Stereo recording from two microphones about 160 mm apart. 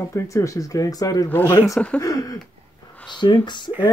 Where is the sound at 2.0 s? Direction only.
20° left (ahead or behind).